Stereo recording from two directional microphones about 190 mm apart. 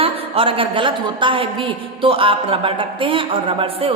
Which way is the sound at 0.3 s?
30° right (ahead or behind).